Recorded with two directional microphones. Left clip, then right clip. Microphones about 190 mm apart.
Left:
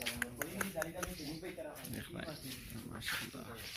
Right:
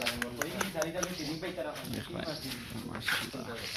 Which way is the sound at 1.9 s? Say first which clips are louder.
Right 8 dB; 5° right (ahead or behind).